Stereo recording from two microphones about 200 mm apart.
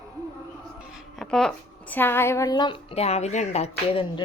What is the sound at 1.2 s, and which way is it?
Speech, 5° left (ahead or behind).